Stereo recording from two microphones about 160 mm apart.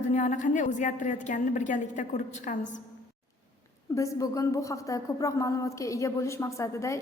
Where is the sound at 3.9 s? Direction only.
20° left (ahead or behind).